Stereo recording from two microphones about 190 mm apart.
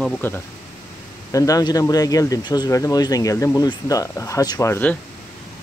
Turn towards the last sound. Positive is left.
turn(degrees=10)  # may be behind; listen again after turning